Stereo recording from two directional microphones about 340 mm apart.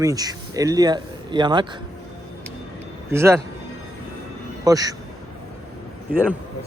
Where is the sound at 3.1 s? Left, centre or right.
Centre.